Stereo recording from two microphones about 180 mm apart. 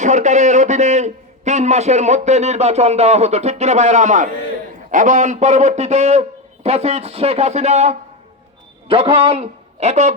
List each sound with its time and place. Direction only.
0.0 s a man's voice: 40° right (ahead or behind)